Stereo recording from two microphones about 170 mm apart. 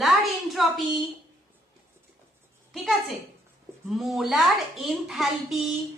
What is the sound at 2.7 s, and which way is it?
A woman's voice, centre (ahead or behind).